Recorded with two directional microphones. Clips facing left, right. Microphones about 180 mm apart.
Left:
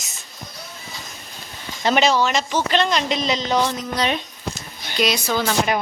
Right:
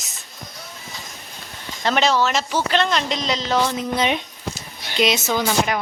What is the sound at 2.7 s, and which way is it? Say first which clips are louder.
Speech: left 1 dB; 10° left (ahead or behind).